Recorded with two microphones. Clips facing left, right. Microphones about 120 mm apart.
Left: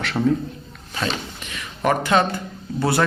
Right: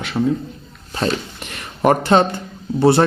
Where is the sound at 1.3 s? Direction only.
50° right (ahead or behind).